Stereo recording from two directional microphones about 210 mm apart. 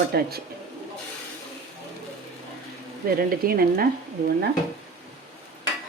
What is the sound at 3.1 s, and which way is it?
Speech, 45° right (ahead or behind).